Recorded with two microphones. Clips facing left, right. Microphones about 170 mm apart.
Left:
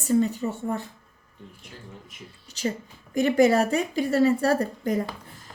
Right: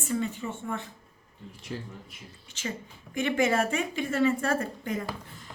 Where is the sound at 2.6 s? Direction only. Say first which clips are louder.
Left 7 dB; 35° left (ahead or behind).